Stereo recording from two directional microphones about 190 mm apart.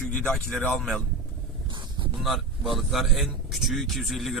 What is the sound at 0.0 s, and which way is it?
A man's voice, 5° left (ahead or behind).